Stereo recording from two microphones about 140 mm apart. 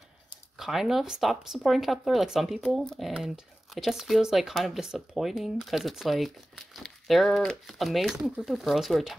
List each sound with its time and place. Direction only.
0.6 s speech: centre (ahead or behind)